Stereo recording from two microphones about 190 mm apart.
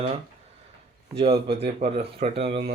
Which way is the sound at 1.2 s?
30° right (ahead or behind).